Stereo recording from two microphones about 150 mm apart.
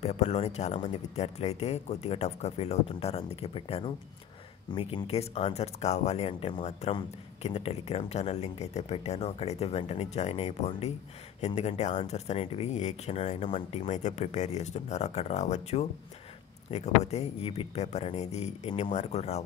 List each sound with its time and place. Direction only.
0.0 s speech: 50° left (ahead or behind)